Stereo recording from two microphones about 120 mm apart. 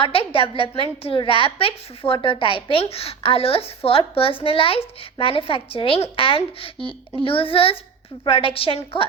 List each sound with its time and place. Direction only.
0.0 s a woman's voice: 50° left (ahead or behind)